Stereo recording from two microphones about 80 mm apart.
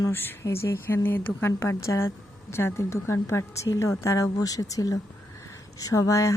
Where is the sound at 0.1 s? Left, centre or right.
Left.